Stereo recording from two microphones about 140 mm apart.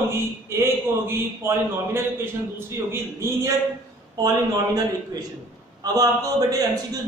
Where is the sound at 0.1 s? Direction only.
20° right (ahead or behind).